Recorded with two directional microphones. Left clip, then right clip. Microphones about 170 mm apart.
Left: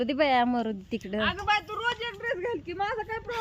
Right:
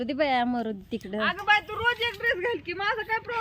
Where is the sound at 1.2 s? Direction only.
70° right (ahead or behind); by 2.4 s 45° right (ahead or behind).